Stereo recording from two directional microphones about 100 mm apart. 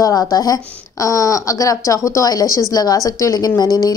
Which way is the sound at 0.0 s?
40° left (ahead or behind).